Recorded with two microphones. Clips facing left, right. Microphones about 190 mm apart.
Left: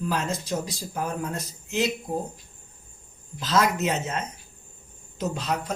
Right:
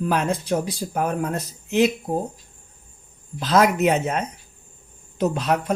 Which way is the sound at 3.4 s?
60° right (ahead or behind).